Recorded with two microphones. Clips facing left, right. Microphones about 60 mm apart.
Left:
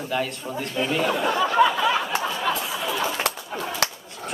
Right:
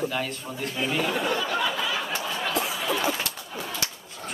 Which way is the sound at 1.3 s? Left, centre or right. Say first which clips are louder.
Left 7 dB; left.